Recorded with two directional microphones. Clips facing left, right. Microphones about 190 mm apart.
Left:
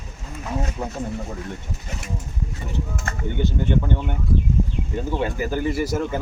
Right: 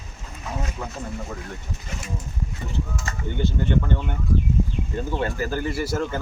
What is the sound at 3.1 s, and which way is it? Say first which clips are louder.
Speech: left 2 dB; 55° left (ahead or behind).